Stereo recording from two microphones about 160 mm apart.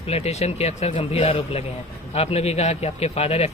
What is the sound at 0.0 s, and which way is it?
A man's voice, 40° left (ahead or behind).